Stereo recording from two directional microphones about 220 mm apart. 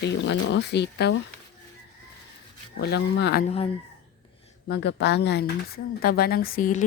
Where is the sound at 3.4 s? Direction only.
25° left (ahead or behind).